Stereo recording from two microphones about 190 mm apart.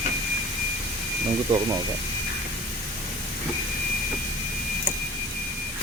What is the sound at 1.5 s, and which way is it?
Speech, 25° right (ahead or behind).